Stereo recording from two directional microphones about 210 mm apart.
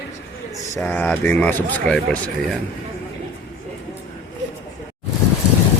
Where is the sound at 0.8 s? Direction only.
10° left (ahead or behind).